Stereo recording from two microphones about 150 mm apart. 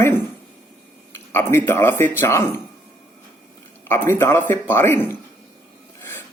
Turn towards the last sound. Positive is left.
turn(degrees=15)  # may be behind; listen again after turning